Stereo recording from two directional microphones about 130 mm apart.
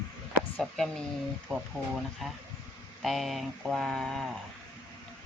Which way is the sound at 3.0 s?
Centre (ahead or behind).